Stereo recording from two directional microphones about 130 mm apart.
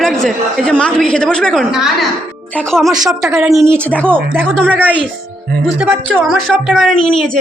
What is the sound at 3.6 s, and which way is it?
Speech, 20° right (ahead or behind).